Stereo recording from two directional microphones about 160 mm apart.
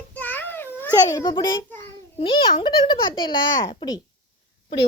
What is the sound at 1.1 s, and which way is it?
A child's voice, 25° left (ahead or behind).